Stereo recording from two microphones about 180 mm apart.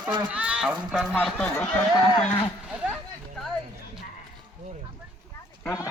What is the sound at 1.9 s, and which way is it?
Speech, 20° left (ahead or behind).